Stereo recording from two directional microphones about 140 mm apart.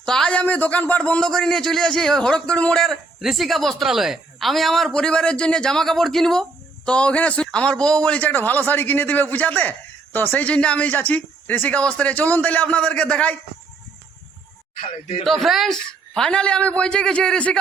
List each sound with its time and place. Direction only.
0.0 s a man's voice: 5° left (ahead or behind)
14.8 s speech: 60° left (ahead or behind)
15.2 s a man's voice: centre (ahead or behind)